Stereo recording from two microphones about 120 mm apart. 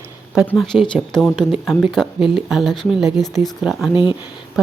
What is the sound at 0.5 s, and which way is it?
Speech, centre (ahead or behind).